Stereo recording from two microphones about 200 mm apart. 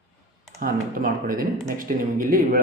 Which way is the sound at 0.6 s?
45° right (ahead or behind).